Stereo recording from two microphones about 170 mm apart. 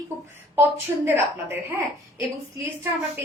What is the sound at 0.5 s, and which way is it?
A woman's voice, 15° right (ahead or behind).